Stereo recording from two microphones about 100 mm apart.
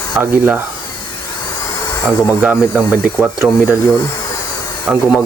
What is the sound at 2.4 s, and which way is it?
Speech, 15° right (ahead or behind).